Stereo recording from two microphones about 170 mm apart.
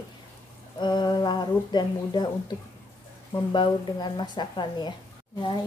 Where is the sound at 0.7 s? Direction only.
25° left (ahead or behind).